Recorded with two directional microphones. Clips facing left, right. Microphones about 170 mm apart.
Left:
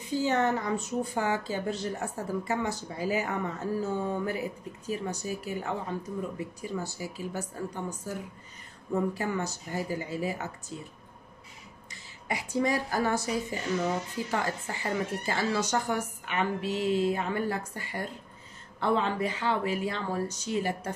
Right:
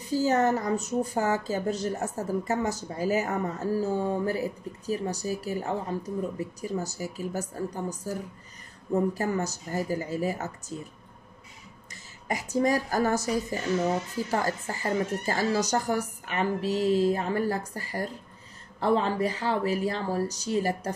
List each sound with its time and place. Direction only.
0.0 s a woman's voice: 40° right (ahead or behind)
11.9 s a woman's voice: 45° right (ahead or behind)